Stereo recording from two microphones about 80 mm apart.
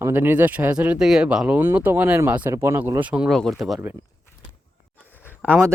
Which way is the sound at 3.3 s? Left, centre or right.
Centre.